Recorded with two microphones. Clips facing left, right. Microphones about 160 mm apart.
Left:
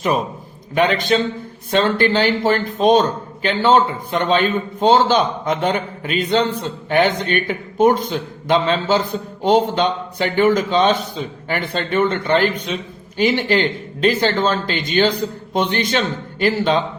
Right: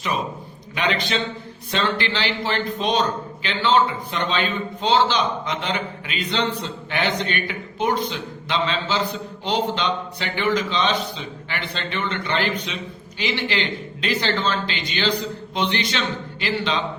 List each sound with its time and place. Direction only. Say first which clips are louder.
0.8 s a man's voice: left 7 dB; 50° left (ahead or behind)